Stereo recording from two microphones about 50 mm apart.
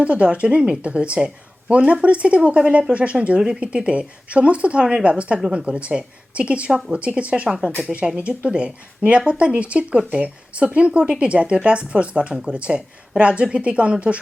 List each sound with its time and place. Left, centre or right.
0.0 s speech: right
6.7 s speech: centre
6.9 s speech: right